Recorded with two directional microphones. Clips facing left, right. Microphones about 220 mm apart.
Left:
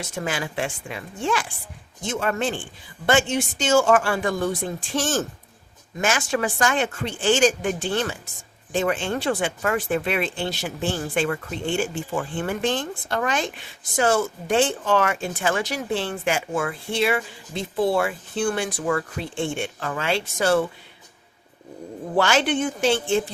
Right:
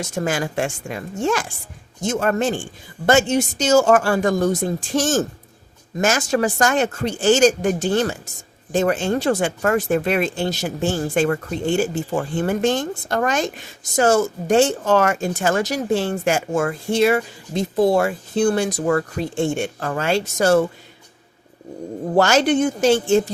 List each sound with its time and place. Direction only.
0.0 s speech: 45° right (ahead or behind)
22.1 s speech: 40° right (ahead or behind)